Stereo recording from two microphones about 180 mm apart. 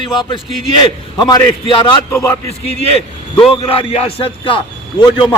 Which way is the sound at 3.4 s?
30° left (ahead or behind).